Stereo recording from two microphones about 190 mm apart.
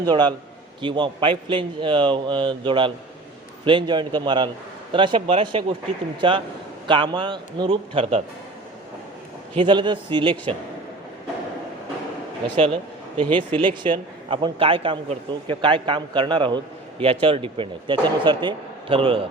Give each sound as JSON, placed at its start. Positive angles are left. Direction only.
{"t": 0.0, "sound": "a man's voice", "side_deg": -20}
{"t": 9.6, "sound": "a man's voice", "side_deg": -25}
{"t": 12.5, "sound": "a man's voice", "side_deg": -30}